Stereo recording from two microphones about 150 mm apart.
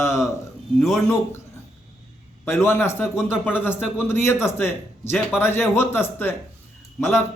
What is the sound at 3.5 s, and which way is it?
A man's voice, 15° left (ahead or behind).